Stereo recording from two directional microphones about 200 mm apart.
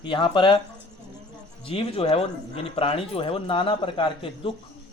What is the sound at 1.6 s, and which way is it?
Speech, 30° left (ahead or behind).